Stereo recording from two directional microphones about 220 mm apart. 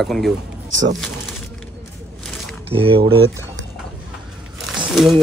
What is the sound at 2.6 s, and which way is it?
Speech, 25° right (ahead or behind).